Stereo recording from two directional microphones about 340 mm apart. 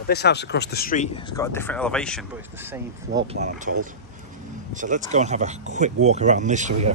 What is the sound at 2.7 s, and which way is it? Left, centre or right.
A man's voice, centre.